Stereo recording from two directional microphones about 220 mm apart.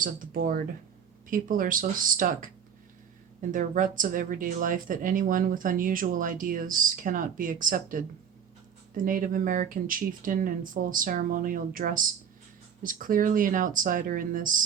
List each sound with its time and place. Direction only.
0.0 s speech: 40° right (ahead or behind)
3.5 s speech: 35° right (ahead or behind)
9.0 s speech: 35° right (ahead or behind)